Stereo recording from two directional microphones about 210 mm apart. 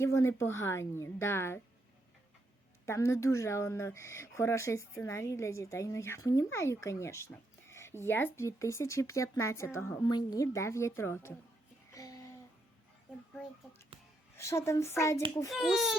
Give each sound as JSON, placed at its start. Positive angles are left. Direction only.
{"t": 0.0, "sound": "speech", "side_deg": 15}
{"t": 2.8, "sound": "speech", "side_deg": 15}
{"t": 11.9, "sound": "a sound", "side_deg": 15}
{"t": 14.3, "sound": "speech", "side_deg": 15}
{"t": 15.4, "sound": "a child's voice", "side_deg": 0}